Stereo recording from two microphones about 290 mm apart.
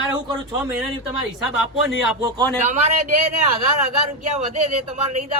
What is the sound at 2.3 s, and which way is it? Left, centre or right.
Speech, right.